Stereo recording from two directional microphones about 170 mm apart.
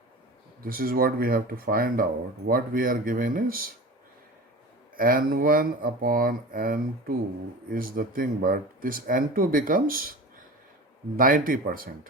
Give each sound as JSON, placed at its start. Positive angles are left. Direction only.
{"t": 0.6, "sound": "speech", "side_deg": -60}
{"t": 4.9, "sound": "speech", "side_deg": -55}
{"t": 11.2, "sound": "speech", "side_deg": -55}